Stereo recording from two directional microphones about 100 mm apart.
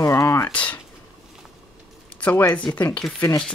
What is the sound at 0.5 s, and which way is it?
Speech, 15° left (ahead or behind).